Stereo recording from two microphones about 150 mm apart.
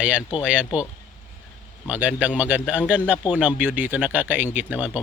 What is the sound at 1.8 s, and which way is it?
Speech, 10° right (ahead or behind).